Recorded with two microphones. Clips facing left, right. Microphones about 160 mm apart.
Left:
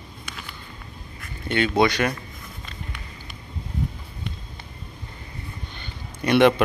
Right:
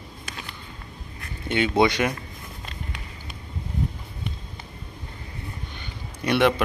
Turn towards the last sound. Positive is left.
turn(degrees=0)  # may be behind; listen again after turning